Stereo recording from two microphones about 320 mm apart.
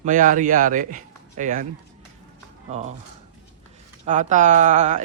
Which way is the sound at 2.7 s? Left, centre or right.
Right.